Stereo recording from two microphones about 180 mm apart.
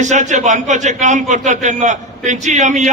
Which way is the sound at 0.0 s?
40° right (ahead or behind).